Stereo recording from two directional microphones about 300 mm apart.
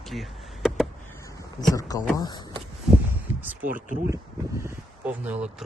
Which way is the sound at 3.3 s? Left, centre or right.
Centre.